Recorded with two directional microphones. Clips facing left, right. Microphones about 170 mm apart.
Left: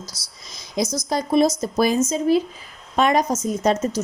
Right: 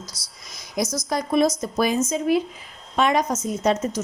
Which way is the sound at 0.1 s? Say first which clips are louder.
Left 1 dB; 5° left (ahead or behind).